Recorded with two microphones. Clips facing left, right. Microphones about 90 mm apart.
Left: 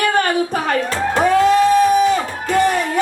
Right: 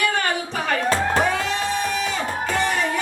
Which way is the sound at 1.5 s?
45° left (ahead or behind).